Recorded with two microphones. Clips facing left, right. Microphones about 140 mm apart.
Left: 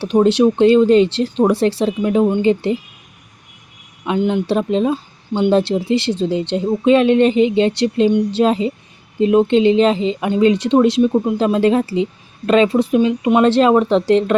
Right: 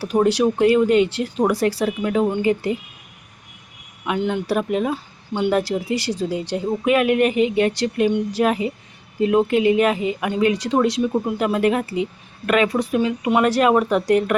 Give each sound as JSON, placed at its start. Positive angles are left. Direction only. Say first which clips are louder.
{"t": 0.0, "sound": "speech", "louder": "left 5 dB", "side_deg": 25}
{"t": 4.0, "sound": "speech", "louder": "left 5 dB", "side_deg": 20}